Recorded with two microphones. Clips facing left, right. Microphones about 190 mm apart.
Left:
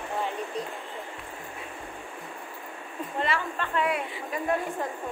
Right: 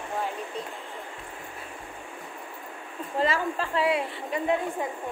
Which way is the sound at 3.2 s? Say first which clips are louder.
Right 4 dB; 30° right (ahead or behind).